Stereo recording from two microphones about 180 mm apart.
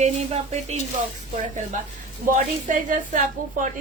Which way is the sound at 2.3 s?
45° right (ahead or behind).